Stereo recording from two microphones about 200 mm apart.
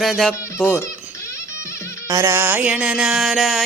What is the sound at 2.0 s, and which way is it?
Speech, 15° right (ahead or behind).